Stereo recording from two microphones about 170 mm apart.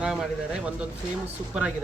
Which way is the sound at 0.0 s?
5° right (ahead or behind).